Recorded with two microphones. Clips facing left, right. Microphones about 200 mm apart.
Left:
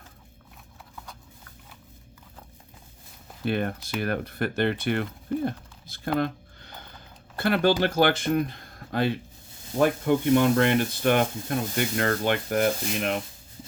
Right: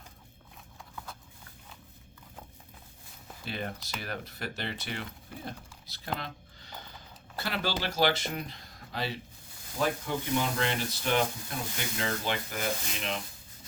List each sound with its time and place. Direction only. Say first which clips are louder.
3.4 s speech: left 10 dB; 55° left (ahead or behind)